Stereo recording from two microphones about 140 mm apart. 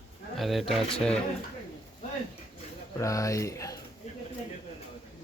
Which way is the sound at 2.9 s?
20° left (ahead or behind).